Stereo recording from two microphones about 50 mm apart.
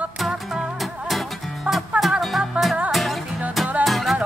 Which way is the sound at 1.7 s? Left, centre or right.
Centre.